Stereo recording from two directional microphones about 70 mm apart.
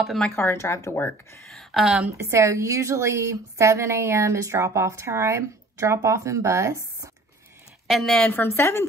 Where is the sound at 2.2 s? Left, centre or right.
Right.